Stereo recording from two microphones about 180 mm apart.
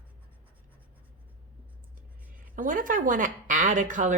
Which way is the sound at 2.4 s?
50° right (ahead or behind).